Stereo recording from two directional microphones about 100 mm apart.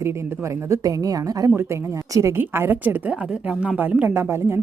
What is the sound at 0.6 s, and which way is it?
A woman's voice, 35° right (ahead or behind).